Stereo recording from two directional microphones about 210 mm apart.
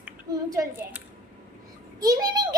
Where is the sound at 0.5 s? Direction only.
15° right (ahead or behind).